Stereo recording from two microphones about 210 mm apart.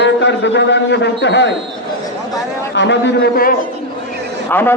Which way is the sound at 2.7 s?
60° left (ahead or behind).